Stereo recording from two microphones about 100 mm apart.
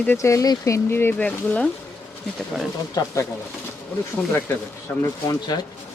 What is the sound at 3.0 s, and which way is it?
Speech, 40° left (ahead or behind).